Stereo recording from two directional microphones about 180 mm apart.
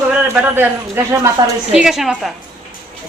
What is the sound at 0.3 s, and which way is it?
Speech, 10° right (ahead or behind).